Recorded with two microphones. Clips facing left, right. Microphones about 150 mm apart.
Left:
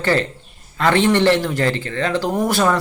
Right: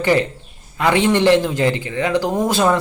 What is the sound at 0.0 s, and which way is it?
A man's voice, 15° right (ahead or behind).